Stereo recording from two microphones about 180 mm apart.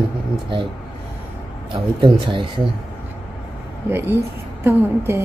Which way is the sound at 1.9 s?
25° right (ahead or behind).